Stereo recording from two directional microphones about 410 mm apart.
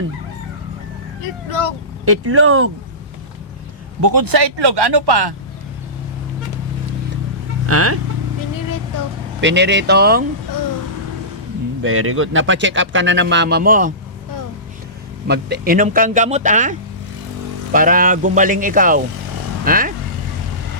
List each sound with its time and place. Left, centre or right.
2.0 s speech: right
4.0 s speech: right
7.7 s speech: right
9.4 s speech: right
11.8 s speech: right
15.3 s speech: right